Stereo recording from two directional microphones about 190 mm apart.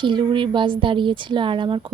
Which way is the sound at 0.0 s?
25° right (ahead or behind).